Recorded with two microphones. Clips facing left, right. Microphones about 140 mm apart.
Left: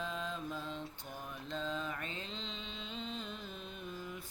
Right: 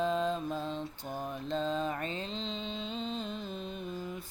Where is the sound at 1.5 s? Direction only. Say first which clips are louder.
Right 7 dB; 30° right (ahead or behind).